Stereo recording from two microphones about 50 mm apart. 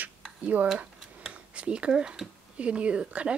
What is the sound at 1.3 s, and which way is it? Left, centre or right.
Speech, right.